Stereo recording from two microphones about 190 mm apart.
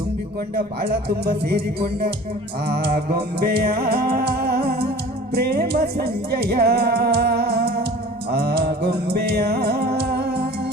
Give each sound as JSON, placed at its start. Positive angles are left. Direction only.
{"t": 0.5, "sound": "speech", "side_deg": -55}
{"t": 2.6, "sound": "music", "side_deg": -55}